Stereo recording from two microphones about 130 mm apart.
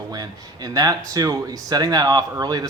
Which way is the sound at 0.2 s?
30° right (ahead or behind).